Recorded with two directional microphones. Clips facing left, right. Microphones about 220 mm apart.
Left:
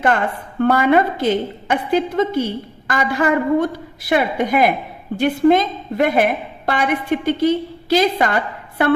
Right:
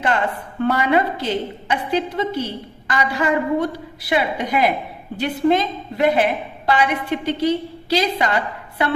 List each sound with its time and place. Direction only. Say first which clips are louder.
0.6 s a woman's voice: left 4 dB; 50° left (ahead or behind)